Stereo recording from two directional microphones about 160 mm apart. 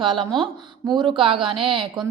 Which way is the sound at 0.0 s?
30° right (ahead or behind).